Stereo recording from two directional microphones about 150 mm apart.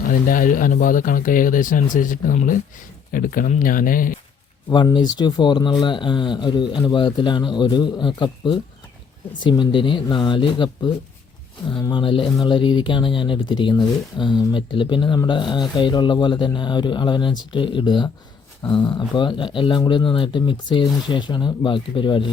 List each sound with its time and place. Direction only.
0.3 s speech: 65° left (ahead or behind)
4.7 s speech: 30° left (ahead or behind)